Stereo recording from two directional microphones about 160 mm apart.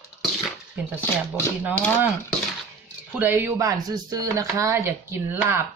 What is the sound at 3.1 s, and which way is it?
Speech, 10° right (ahead or behind).